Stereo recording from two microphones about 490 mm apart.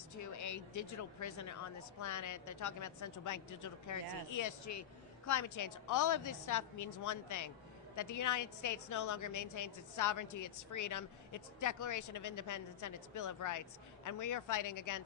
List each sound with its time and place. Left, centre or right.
0.1 s speech: left